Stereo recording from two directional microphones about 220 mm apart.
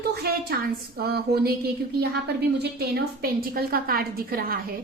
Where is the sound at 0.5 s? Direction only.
45° right (ahead or behind).